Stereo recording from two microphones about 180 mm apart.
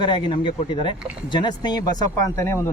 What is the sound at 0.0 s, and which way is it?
Speech, 25° left (ahead or behind).